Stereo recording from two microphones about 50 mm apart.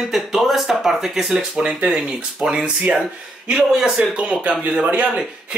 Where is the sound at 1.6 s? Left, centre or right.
Right.